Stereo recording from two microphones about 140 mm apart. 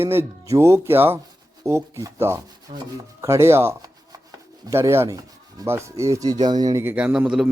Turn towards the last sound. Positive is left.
turn(degrees=-5)  # may be behind; listen again after turning